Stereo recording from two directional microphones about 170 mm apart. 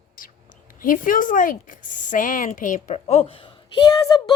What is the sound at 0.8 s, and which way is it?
Speech, 50° left (ahead or behind).